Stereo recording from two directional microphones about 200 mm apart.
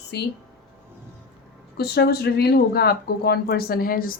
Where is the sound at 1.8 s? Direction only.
50° left (ahead or behind).